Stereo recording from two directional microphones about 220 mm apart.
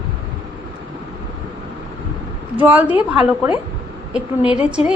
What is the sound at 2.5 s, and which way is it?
A woman's voice, 5° right (ahead or behind).